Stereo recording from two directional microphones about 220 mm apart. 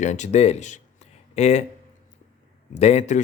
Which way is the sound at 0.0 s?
35° left (ahead or behind).